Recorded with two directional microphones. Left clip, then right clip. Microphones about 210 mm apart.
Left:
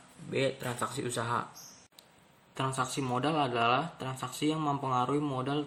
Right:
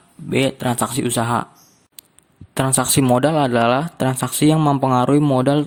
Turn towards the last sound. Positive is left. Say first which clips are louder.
# right 16 dB
turn(degrees=-55)  # may be behind; listen again after turning